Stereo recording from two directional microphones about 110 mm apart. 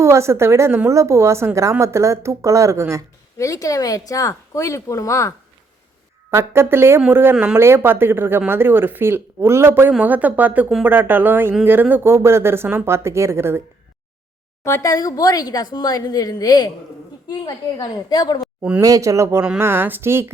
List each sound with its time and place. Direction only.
0.0 s speech: 25° right (ahead or behind)
3.3 s speech: 30° left (ahead or behind)
6.3 s speech: 20° right (ahead or behind)
14.6 s speech: 30° left (ahead or behind)
18.8 s speech: 30° right (ahead or behind)